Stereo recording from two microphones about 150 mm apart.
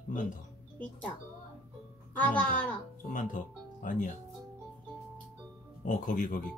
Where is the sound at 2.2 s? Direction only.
10° left (ahead or behind).